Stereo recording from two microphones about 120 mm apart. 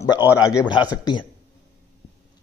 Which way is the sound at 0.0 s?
30° left (ahead or behind).